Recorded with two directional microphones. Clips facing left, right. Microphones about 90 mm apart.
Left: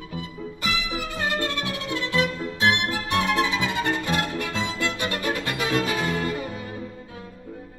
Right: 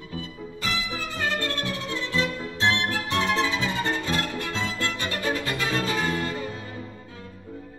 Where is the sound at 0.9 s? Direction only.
15° left (ahead or behind).